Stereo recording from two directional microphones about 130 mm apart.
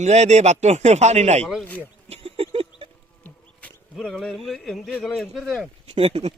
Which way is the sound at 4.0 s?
5° left (ahead or behind).